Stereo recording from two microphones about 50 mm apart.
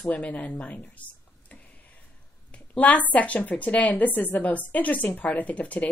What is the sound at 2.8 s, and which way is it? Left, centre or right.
A woman's voice, left.